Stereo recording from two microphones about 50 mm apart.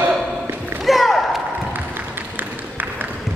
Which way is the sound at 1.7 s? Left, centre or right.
Right.